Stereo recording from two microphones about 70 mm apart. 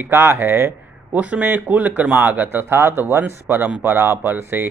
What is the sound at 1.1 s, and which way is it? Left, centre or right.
A man's voice, right.